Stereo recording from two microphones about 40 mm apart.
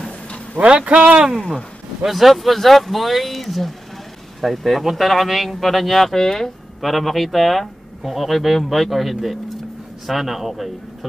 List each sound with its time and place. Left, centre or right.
0.7 s speech: right
2.0 s speech: centre
6.8 s speech: centre